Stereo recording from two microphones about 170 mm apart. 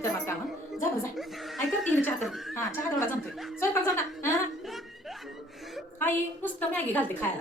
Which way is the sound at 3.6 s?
15° left (ahead or behind).